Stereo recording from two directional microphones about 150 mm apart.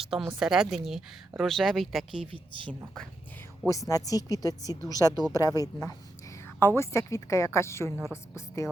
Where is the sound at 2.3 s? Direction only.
35° right (ahead or behind).